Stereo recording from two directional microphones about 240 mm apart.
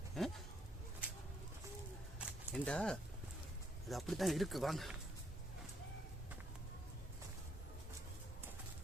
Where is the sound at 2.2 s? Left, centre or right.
Centre.